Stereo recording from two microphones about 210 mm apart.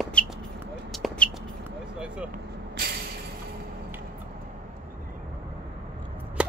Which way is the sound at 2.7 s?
45° right (ahead or behind).